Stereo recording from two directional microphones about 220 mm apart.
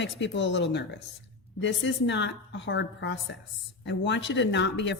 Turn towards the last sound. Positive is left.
turn(degrees=55)  # may be behind; listen again after turning